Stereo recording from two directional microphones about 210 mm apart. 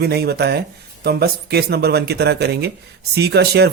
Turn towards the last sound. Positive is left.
turn(degrees=-50)  # may be behind; listen again after turning